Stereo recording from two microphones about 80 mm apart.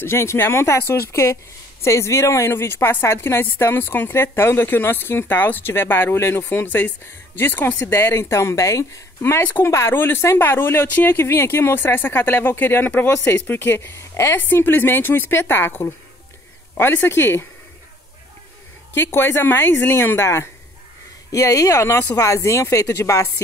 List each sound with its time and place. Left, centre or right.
0.0 s speech: left
9.2 s speech: left
18.9 s speech: left